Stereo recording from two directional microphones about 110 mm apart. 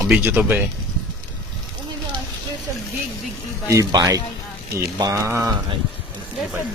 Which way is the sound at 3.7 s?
35° right (ahead or behind).